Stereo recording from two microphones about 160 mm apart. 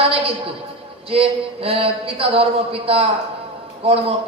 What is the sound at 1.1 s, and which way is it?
A man's voice, 35° right (ahead or behind).